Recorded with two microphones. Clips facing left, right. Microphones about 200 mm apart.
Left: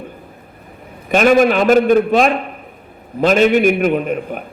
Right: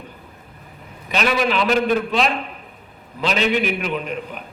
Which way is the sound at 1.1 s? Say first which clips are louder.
Left 9 dB; 50° left (ahead or behind).